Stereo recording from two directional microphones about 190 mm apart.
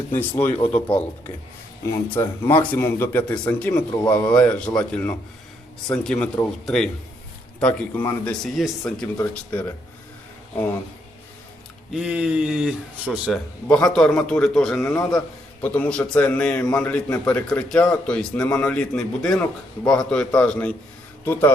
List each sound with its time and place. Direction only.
0.1 s a man's voice: 10° left (ahead or behind)
11.9 s a man's voice: 5° right (ahead or behind)